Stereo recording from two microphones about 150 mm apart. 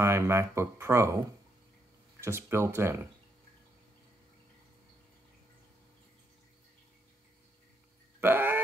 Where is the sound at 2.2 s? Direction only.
15° right (ahead or behind).